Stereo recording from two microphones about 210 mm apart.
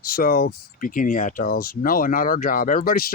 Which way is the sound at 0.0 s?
45° left (ahead or behind).